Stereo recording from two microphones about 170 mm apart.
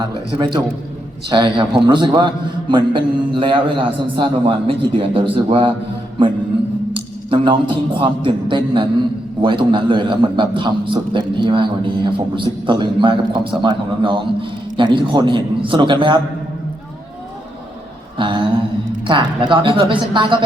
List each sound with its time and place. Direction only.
0.0 s a man's voice: 25° right (ahead or behind)
6.9 s a man's voice: 30° right (ahead or behind)
18.2 s a sound: 30° right (ahead or behind)
19.0 s a man's voice: 30° right (ahead or behind)